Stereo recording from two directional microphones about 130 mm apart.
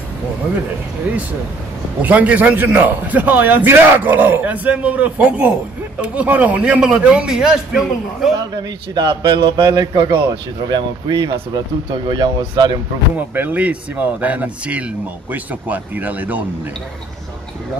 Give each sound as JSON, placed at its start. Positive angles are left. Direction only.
{"t": 2.0, "sound": "a man's voice", "side_deg": -10}
{"t": 8.6, "sound": "a man's voice", "side_deg": -35}
{"t": 13.1, "sound": "a man's voice", "side_deg": -15}